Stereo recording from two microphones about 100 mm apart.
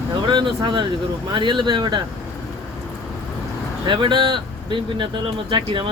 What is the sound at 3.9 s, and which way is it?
Speech, 55° right (ahead or behind).